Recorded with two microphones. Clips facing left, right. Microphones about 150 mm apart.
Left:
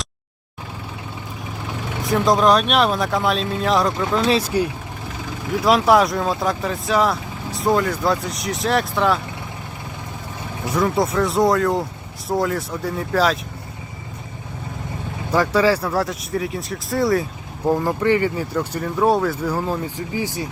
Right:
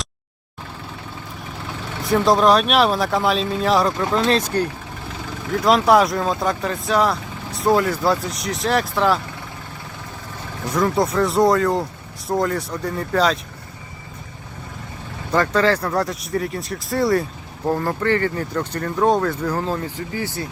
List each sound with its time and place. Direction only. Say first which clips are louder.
2.0 s speech: right 1 dB; centre (ahead or behind)
10.7 s speech: even; centre (ahead or behind)
15.3 s speech: left 1 dB; 10° left (ahead or behind)
17.7 s speech: left 2 dB; 15° left (ahead or behind)